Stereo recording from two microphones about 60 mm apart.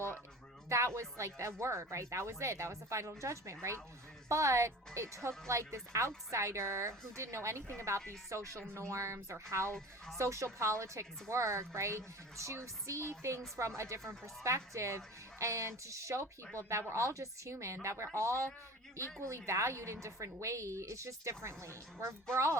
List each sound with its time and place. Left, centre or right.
0.7 s a woman's voice: right